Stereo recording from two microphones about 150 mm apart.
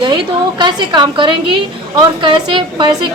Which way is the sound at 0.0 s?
30° right (ahead or behind).